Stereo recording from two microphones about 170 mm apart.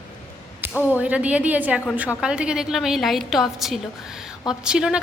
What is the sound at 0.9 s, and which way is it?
A woman's voice, 10° right (ahead or behind).